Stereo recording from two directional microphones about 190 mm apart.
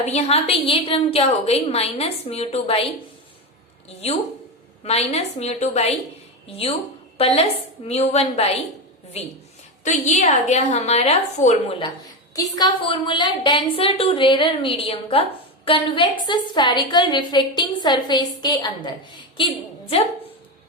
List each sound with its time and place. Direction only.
0.0 s a woman's voice: 35° left (ahead or behind)
3.8 s a woman's voice: 35° left (ahead or behind)
7.2 s a woman's voice: 30° left (ahead or behind)
12.3 s a woman's voice: 20° left (ahead or behind)